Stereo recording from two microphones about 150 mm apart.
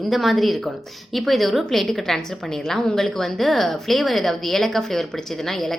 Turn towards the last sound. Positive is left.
turn(degrees=0)  # may be behind; listen again after turning